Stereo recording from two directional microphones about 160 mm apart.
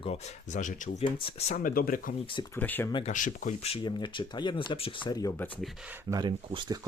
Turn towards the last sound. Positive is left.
turn(degrees=-30)  # may be behind; listen again after turning